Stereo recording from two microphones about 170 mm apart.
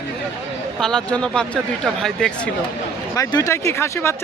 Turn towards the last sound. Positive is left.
turn(degrees=15)  # may be behind; listen again after turning